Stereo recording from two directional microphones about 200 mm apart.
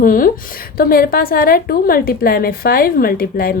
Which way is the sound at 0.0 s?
45° left (ahead or behind).